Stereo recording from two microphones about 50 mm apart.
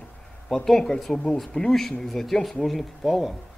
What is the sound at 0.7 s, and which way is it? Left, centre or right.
Speech, centre.